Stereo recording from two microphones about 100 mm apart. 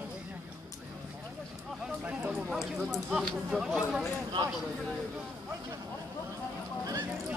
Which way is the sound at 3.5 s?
5° right (ahead or behind).